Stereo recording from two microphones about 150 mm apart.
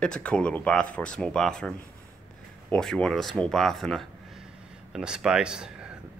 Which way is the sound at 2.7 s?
5° left (ahead or behind).